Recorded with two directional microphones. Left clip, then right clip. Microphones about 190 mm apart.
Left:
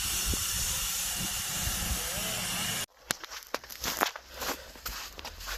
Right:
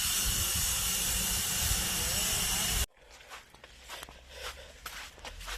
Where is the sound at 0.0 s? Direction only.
45° right (ahead or behind).